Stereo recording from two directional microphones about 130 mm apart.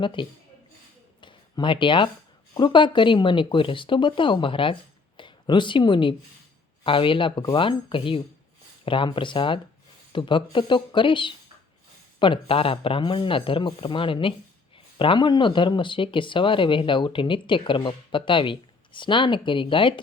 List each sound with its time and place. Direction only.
0.0 s speech: 40° left (ahead or behind)
1.2 s a sound: 40° left (ahead or behind)
2.6 s speech: 35° left (ahead or behind)